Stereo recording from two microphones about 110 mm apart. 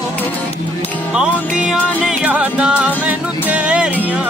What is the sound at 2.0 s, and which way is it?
Music, 10° right (ahead or behind).